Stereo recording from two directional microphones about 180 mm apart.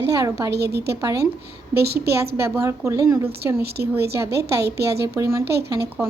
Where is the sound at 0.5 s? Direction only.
65° right (ahead or behind).